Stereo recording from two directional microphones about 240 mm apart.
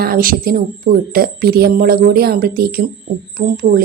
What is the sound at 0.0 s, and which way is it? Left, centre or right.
Speech, right.